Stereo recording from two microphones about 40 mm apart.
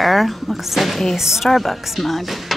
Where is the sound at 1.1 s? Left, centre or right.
Centre.